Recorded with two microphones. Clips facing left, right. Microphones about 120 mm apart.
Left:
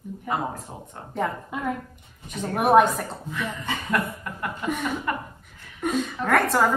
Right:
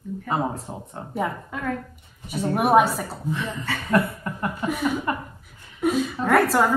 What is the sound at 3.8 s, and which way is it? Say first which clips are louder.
Speech: right 6 dB; 30° right (ahead or behind).